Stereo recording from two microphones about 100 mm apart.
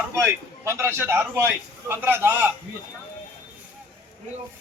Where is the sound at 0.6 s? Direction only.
25° right (ahead or behind).